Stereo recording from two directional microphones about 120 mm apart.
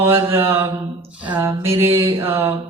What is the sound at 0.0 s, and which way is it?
A woman's voice, 20° right (ahead or behind).